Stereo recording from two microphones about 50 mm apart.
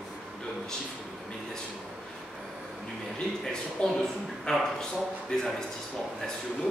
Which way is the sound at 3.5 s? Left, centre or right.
Centre.